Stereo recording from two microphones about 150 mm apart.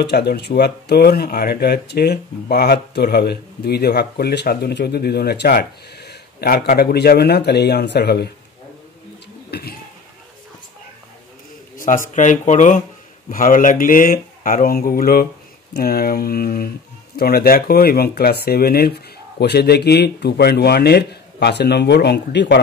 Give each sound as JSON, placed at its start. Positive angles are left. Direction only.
{"t": 0.1, "sound": "speech", "side_deg": 90}
{"t": 9.5, "sound": "a sound", "side_deg": 90}
{"t": 11.7, "sound": "speech", "side_deg": 65}
{"t": 15.7, "sound": "speech", "side_deg": 90}